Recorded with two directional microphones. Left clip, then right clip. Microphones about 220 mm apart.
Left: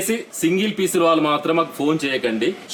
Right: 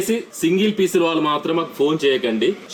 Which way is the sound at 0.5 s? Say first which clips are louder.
Right 4 dB; 30° left (ahead or behind).